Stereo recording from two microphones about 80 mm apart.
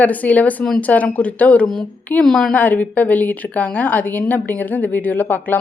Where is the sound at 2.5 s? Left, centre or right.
Centre.